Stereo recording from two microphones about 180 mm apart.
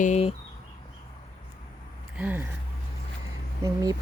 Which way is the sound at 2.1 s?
10° right (ahead or behind).